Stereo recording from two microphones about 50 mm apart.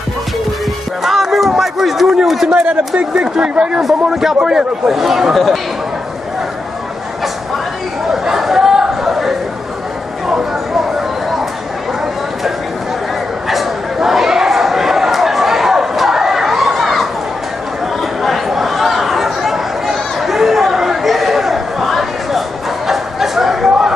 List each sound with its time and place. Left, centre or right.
1.0 s a sound: centre
2.5 s speech: right
3.8 s a man's voice: centre
8.1 s chatter: centre
13.5 s a sound: centre
18.2 s chatter: centre